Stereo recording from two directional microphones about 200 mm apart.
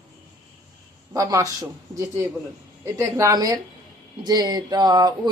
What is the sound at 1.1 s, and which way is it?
Speech, 15° right (ahead or behind).